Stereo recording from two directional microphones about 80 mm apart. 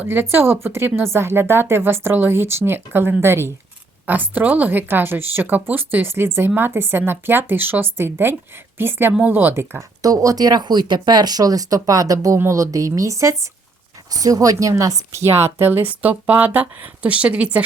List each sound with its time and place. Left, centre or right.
0.0 s speech: right